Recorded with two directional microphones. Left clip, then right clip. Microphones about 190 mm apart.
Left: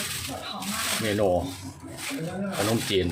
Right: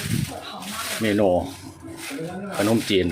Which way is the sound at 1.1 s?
20° right (ahead or behind).